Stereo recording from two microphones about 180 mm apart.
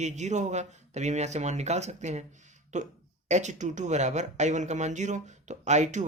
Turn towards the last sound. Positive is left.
turn(degrees=-40)  # may be behind; listen again after turning